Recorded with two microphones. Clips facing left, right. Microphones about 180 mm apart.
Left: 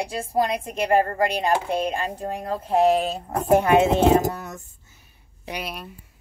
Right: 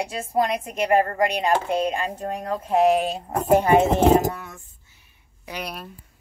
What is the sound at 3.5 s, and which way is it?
Speech, 65° left (ahead or behind).